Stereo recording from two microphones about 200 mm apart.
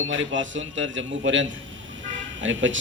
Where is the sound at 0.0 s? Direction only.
70° right (ahead or behind).